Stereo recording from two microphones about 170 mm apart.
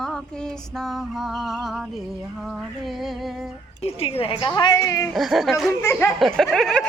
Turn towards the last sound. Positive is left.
turn(degrees=0)  # may be behind; listen again after turning